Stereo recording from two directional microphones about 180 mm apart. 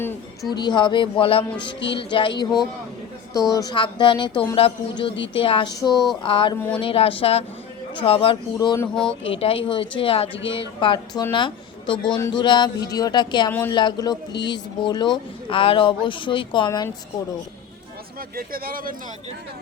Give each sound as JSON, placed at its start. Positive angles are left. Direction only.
{"t": 0.5, "sound": "a man's voice", "side_deg": 25}
{"t": 3.5, "sound": "a man's voice", "side_deg": 20}
{"t": 9.2, "sound": "a man's voice", "side_deg": 30}
{"t": 18.3, "sound": "speech", "side_deg": -55}